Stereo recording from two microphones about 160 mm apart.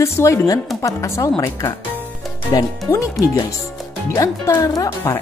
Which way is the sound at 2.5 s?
25° left (ahead or behind).